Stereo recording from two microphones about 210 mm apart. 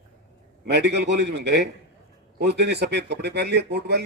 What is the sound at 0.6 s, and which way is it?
Speech, 50° right (ahead or behind).